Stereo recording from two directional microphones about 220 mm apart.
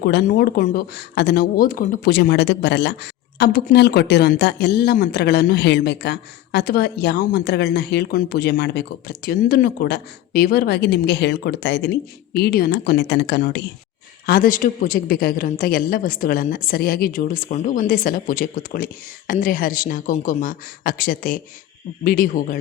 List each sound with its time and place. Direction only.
0.0 s a man's voice: 45° left (ahead or behind)